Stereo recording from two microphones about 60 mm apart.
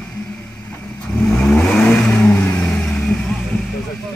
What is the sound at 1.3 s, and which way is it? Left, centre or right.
Vehicle, centre.